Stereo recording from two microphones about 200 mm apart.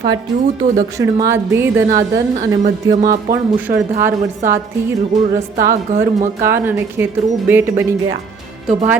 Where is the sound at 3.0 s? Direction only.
45° right (ahead or behind).